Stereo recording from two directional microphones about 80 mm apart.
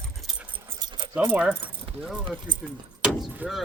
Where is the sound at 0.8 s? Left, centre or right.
Right.